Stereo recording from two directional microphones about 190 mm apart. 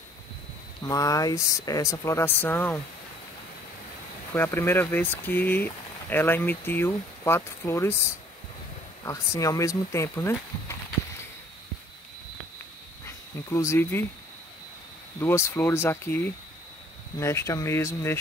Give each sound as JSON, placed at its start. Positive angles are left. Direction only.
{"t": 0.8, "sound": "speech", "side_deg": 20}
{"t": 4.3, "sound": "speech", "side_deg": 10}
{"t": 9.0, "sound": "speech", "side_deg": 15}
{"t": 13.0, "sound": "speech", "side_deg": 15}
{"t": 15.1, "sound": "speech", "side_deg": 15}